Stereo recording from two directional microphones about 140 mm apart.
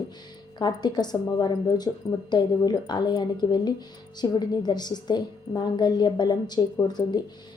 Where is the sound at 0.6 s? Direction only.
30° left (ahead or behind).